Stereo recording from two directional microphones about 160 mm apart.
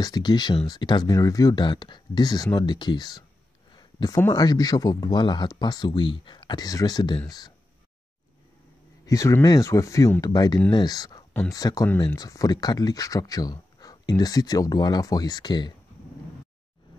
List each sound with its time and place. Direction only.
0.0 s speech: 25° left (ahead or behind)
3.7 s a sound: 25° left (ahead or behind)
4.2 s speech: 25° left (ahead or behind)
9.0 s speech: 20° left (ahead or behind)